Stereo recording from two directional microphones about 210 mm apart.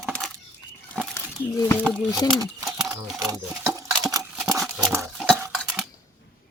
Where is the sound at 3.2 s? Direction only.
15° right (ahead or behind).